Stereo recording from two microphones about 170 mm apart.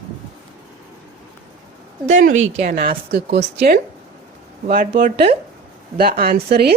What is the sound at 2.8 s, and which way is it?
A woman's voice, 65° right (ahead or behind).